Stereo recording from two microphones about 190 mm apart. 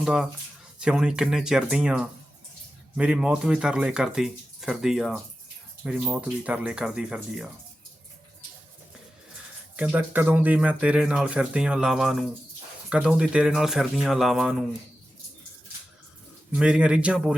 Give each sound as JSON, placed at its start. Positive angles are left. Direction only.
{"t": 0.0, "sound": "speech", "side_deg": 0}
{"t": 9.7, "sound": "speech", "side_deg": -10}
{"t": 16.6, "sound": "speech", "side_deg": -5}